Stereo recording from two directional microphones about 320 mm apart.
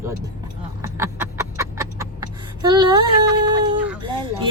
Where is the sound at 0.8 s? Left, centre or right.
Centre.